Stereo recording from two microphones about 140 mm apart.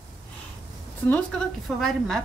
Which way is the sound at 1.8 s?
Centre (ahead or behind).